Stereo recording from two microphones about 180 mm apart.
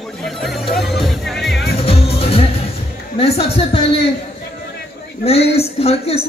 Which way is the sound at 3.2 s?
35° left (ahead or behind).